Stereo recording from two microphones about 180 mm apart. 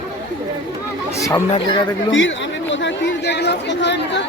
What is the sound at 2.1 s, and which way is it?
Speech, 90° left.